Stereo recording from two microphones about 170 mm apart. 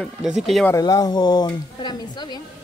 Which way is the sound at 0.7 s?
20° left (ahead or behind).